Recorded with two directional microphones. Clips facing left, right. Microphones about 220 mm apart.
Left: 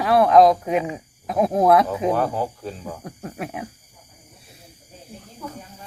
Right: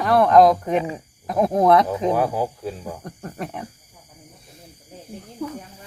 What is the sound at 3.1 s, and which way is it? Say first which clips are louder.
Speech: even; 5° left (ahead or behind).